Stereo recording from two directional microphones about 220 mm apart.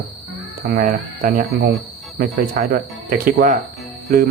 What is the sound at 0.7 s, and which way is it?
Speech, 40° right (ahead or behind).